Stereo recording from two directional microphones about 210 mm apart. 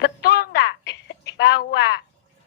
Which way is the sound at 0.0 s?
50° left (ahead or behind).